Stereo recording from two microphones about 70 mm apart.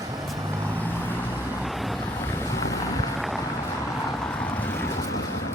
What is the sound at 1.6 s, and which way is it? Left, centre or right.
Vehicle, centre.